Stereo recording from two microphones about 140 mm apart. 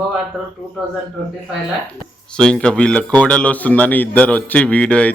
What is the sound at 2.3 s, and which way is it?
Speech, 5° left (ahead or behind).